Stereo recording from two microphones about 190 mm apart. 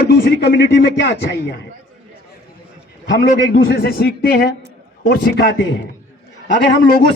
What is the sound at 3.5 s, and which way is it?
A man's voice, 55° left (ahead or behind).